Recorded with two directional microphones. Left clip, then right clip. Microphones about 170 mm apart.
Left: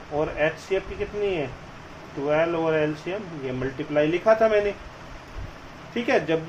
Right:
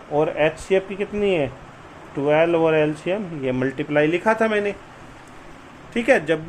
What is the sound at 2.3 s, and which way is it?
Speech, 80° right.